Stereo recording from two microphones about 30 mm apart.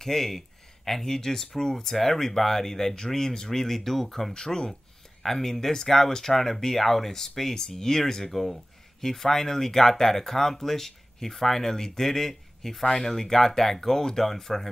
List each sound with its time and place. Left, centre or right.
0.0 s speech: centre